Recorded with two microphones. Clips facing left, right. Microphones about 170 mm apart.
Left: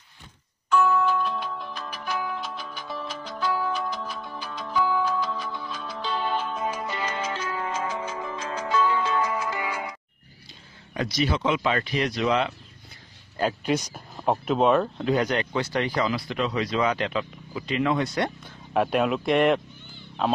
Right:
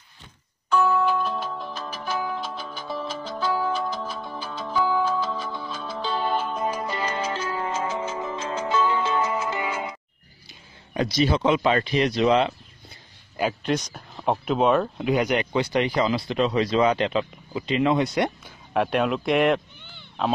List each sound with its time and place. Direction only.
0.7 s music: 35° right (ahead or behind)
10.9 s speech: 25° right (ahead or behind)
13.7 s speech: 10° left (ahead or behind)
15.0 s speech: 15° right (ahead or behind)
18.4 s speech: centre (ahead or behind)
19.8 s a sound: 70° right (ahead or behind)